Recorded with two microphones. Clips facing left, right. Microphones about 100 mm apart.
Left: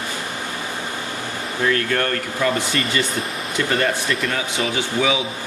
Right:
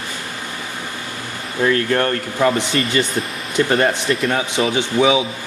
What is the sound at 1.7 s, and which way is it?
Speech, 30° right (ahead or behind).